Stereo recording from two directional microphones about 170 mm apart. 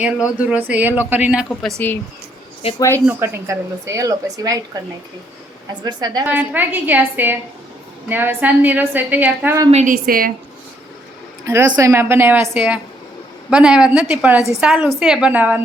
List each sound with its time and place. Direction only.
0.0 s a woman's voice: 10° right (ahead or behind)
2.6 s speech: 35° left (ahead or behind)
3.1 s a woman's voice: 15° right (ahead or behind)
5.8 s a woman's voice: 25° right (ahead or behind)
6.2 s a woman's voice: 10° right (ahead or behind)
9.7 s a woman's voice: 55° right (ahead or behind)
11.4 s a woman's voice: 15° right (ahead or behind)